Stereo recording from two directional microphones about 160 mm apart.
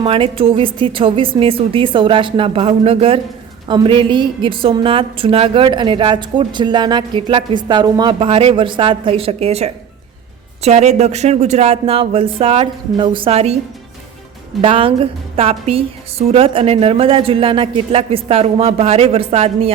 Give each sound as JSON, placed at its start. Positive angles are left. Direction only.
{"t": 0.0, "sound": "a woman's voice", "side_deg": -35}
{"t": 14.6, "sound": "a woman's voice", "side_deg": -35}